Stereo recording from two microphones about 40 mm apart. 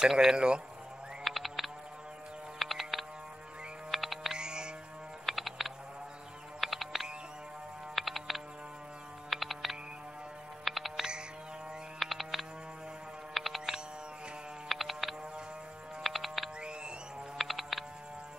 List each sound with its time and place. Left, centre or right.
0.0 s a man's voice: centre
1.2 s music: centre
2.6 s a sound: centre
3.9 s music: centre
4.3 s a sound: right
5.2 s music: centre
11.0 s music: right
12.0 s music: centre
16.0 s a sound: centre
17.4 s music: centre